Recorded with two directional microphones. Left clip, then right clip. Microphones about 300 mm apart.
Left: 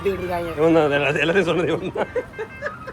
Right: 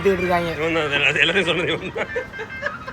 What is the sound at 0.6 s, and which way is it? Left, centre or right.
Speech, centre.